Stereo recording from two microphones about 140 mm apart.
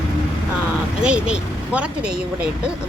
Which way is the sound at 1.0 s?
5° right (ahead or behind).